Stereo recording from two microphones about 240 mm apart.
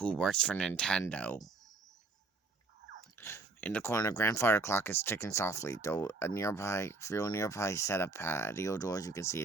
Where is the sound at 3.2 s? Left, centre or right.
Centre.